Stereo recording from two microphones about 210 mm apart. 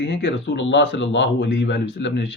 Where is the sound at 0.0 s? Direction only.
55° left (ahead or behind).